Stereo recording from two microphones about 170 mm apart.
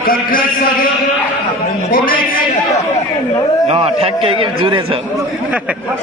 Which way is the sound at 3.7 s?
35° right (ahead or behind).